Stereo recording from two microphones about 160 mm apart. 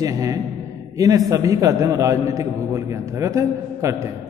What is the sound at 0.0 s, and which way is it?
A man's voice, 20° right (ahead or behind).